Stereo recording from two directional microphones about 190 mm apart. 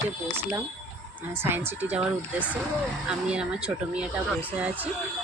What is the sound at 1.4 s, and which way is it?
Speech, 10° right (ahead or behind).